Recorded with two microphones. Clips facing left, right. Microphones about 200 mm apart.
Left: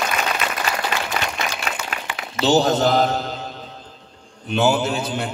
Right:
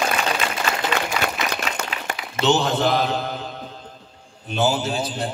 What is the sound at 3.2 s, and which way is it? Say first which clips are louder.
Mantra: even; 55° right (ahead or behind).